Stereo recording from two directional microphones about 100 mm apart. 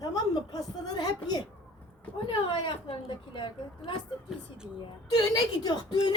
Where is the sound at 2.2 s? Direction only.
60° left (ahead or behind).